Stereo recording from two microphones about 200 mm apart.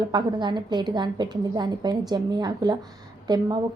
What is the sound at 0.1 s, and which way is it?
A woman's voice, 20° right (ahead or behind).